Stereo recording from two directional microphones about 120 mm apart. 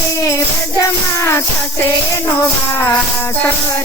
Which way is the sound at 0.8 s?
25° left (ahead or behind).